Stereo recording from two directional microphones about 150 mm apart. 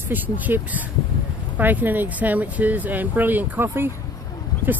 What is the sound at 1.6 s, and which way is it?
Speech, 10° right (ahead or behind).